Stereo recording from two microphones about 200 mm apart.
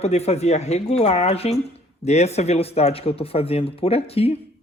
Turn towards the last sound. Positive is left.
turn(degrees=30)  # may be behind; listen again after turning